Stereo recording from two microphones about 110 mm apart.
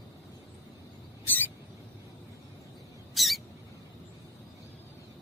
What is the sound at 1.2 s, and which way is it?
Rodents, 15° left (ahead or behind).